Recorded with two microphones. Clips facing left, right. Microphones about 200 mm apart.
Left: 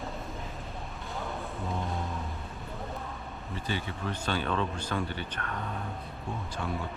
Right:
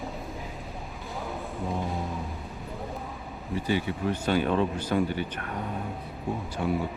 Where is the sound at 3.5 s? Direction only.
10° right (ahead or behind).